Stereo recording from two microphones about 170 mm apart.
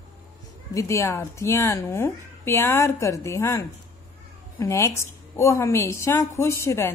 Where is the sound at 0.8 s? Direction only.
15° left (ahead or behind).